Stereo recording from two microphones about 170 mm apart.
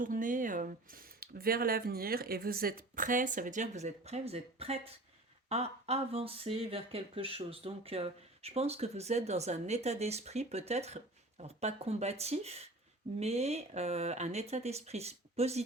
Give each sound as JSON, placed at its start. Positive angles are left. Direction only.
{"t": 0.0, "sound": "speech", "side_deg": -50}